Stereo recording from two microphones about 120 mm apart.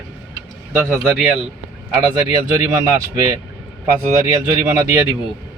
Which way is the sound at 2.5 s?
25° right (ahead or behind).